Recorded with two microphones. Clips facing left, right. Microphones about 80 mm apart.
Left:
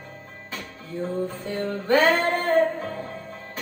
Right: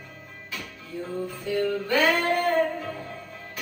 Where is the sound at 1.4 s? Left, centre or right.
Left.